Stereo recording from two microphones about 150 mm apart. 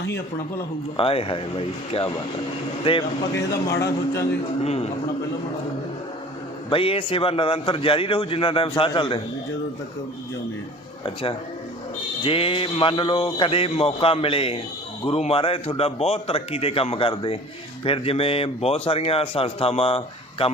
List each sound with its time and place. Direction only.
0.9 s a man's voice: 40° left (ahead or behind)
3.3 s a man's voice: 20° left (ahead or behind)
4.6 s a man's voice: 45° left (ahead or behind)
6.7 s a man's voice: 35° left (ahead or behind)
11.0 s a man's voice: 35° left (ahead or behind)